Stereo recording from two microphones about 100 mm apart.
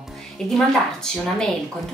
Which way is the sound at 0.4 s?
5° left (ahead or behind).